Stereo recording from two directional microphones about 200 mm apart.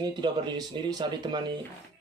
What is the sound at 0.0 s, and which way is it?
Speech, 20° right (ahead or behind).